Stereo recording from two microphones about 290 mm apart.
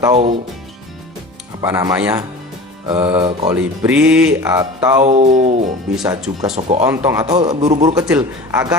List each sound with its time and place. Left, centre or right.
0.0 s a man's voice: centre
1.6 s a man's voice: centre
3.5 s speech: centre
5.0 s music: right
6.8 s a man's voice: centre